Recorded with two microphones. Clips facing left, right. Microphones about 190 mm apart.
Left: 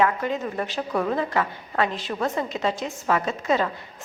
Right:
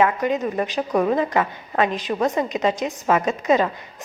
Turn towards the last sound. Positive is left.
turn(degrees=-15)  # may be behind; listen again after turning